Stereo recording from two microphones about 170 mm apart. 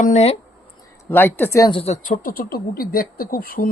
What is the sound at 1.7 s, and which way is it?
Speech, 35° left (ahead or behind).